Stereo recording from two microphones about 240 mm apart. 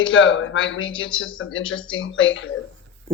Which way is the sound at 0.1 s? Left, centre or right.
Left.